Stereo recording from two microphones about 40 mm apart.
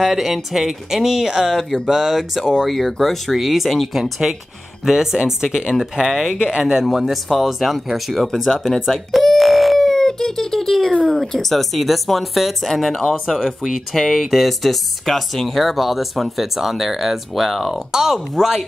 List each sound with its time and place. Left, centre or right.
0.0 s speech: centre
5.9 s speech: centre
8.8 s speech: centre
9.2 s a sound: centre
11.1 s speech: centre